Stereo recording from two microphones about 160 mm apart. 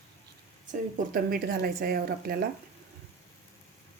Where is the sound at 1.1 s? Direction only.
65° right (ahead or behind).